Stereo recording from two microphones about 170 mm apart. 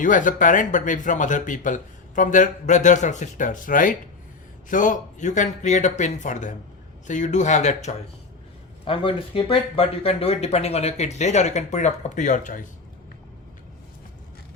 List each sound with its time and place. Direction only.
0.0 s speech: 50° left (ahead or behind)
8.8 s speech: 30° left (ahead or behind); by 12.6 s 50° left (ahead or behind)